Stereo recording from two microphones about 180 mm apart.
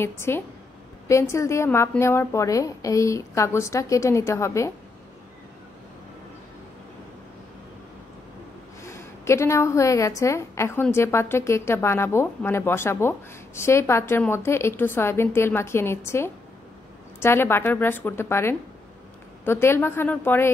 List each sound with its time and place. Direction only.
0.0 s a woman's voice: 15° left (ahead or behind)
8.8 s a woman's voice: 15° left (ahead or behind)